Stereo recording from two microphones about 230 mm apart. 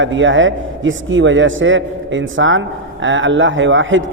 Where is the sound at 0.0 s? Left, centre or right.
Right.